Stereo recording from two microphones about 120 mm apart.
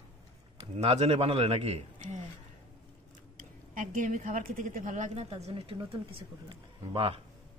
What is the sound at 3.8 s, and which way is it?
A woman's voice, 90° right.